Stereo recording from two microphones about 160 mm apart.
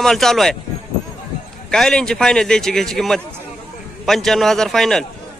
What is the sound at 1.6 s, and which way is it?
Speech, 5° left (ahead or behind).